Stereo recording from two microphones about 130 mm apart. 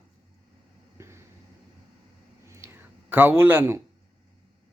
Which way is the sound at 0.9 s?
20° right (ahead or behind).